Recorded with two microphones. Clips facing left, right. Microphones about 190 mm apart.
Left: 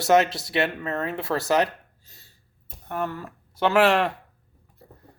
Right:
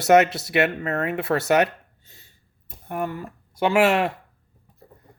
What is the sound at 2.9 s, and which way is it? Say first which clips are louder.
Speech: right 1 dB; 15° right (ahead or behind).